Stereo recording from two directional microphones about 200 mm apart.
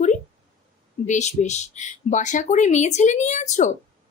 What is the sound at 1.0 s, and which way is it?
Speech, 35° left (ahead or behind).